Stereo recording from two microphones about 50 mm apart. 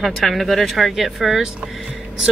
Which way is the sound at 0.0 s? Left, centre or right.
Centre.